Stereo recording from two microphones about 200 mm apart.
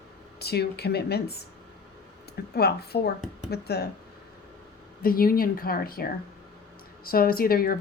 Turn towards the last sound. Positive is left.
turn(degrees=45)  # may be behind; listen again after turning